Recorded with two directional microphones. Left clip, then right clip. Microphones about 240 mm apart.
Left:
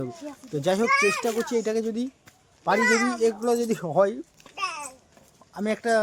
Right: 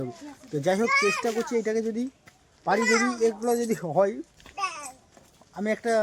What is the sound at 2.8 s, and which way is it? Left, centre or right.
Speech, left.